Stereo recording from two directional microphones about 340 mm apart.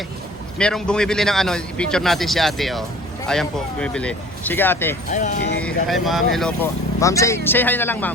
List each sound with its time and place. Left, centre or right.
0.6 s speech: centre
5.1 s speech: left
5.5 s speech: centre